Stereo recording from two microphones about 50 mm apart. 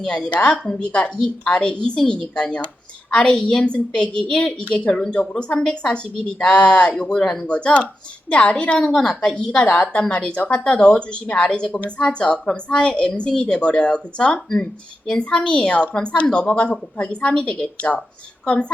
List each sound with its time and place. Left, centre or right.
0.3 s a woman's voice: left
9.0 s a woman's voice: centre
9.3 s a woman's voice: centre
17.7 s a woman's voice: left